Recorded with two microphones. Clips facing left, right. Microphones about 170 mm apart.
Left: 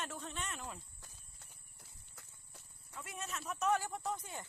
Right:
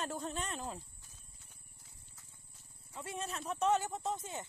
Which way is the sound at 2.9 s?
30° right (ahead or behind).